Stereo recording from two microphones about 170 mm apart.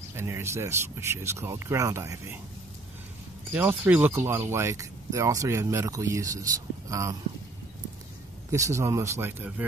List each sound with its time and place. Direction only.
0.1 s speech: 15° right (ahead or behind)
3.5 s speech: 10° right (ahead or behind)
8.5 s speech: 20° right (ahead or behind)